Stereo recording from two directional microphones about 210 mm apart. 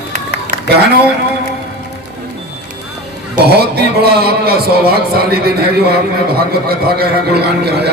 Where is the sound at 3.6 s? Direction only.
50° right (ahead or behind).